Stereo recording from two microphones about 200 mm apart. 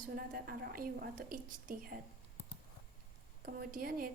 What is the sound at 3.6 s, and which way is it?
Speech, 45° right (ahead or behind).